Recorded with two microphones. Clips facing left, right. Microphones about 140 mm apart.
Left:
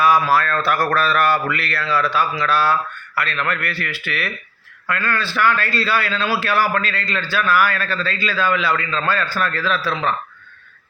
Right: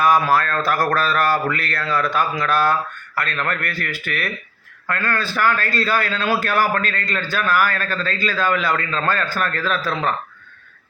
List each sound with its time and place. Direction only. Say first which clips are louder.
0.0 s a man's voice: even; 45° right (ahead or behind)